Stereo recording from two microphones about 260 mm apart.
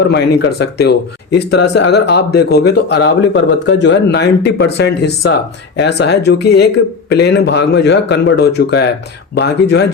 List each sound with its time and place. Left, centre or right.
0.6 s speech: left